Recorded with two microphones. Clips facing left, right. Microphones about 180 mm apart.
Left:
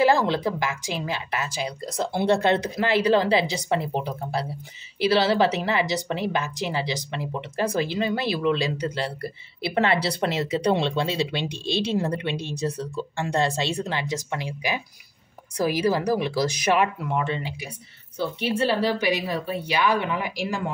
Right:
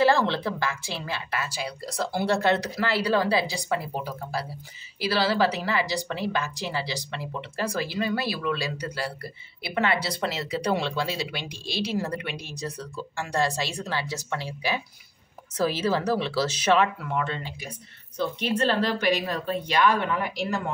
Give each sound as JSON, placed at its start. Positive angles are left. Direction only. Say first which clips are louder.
{"t": 0.0, "sound": "a woman's voice", "louder": "left 2 dB", "side_deg": 15}